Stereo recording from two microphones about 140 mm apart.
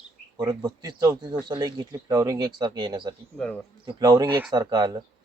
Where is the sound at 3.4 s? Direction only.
10° left (ahead or behind).